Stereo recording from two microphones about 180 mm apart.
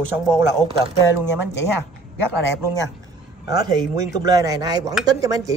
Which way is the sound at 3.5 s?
20° right (ahead or behind).